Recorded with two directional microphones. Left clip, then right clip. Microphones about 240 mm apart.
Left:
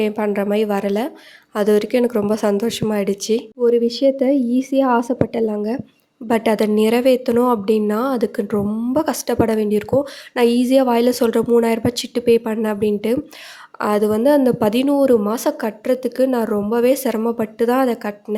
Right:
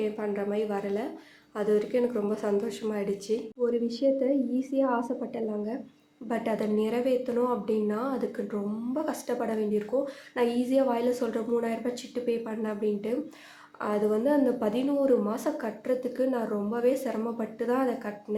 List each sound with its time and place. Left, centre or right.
0.0 s a woman's voice: left